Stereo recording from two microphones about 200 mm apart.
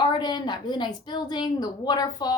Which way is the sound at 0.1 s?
20° left (ahead or behind).